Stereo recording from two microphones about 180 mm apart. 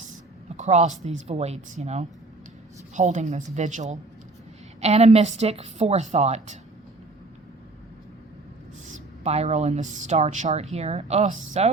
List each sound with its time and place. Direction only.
0.5 s a woman's voice: 40° right (ahead or behind)
8.9 s a woman's voice: 35° right (ahead or behind)